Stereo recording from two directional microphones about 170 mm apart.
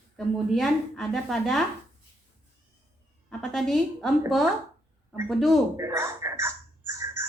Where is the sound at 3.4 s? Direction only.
Centre (ahead or behind).